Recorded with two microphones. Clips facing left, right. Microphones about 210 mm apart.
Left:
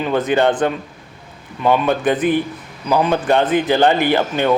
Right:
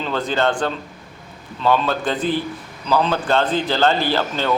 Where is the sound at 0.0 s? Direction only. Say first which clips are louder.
Left 5 dB; 20° left (ahead or behind).